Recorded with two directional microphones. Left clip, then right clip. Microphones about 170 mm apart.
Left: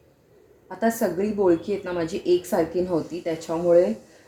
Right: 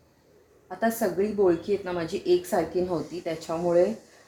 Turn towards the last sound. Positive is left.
turn(degrees=60)  # may be behind; listen again after turning